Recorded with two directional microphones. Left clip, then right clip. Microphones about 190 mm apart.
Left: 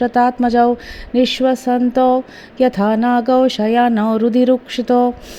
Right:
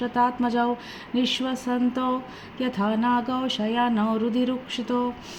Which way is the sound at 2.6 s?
45° left (ahead or behind).